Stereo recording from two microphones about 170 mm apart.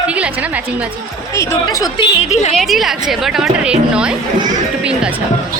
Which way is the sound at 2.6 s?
Centre (ahead or behind).